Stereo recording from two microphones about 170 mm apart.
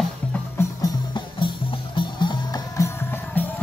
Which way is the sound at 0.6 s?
25° left (ahead or behind).